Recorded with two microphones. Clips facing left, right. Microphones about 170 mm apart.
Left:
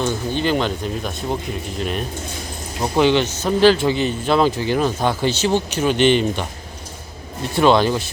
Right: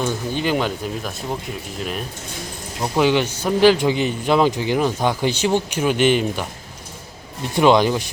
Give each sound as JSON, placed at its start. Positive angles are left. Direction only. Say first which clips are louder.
{"t": 0.0, "sound": "a man's voice", "louder": "left 1 dB", "side_deg": -10}
{"t": 7.5, "sound": "a man's voice", "louder": "even", "side_deg": -15}